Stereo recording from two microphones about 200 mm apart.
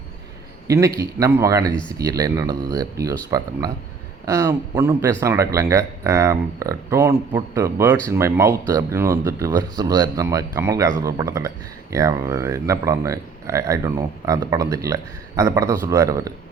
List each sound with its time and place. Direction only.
0.7 s speech: 15° right (ahead or behind)